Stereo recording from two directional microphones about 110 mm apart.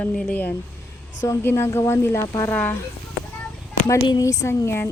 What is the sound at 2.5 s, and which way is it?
Speech, 15° left (ahead or behind).